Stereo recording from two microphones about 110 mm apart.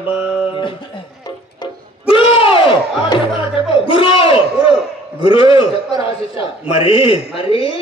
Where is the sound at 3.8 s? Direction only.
55° left (ahead or behind).